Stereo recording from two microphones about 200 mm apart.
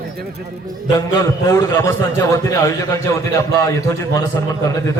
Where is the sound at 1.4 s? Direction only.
15° left (ahead or behind).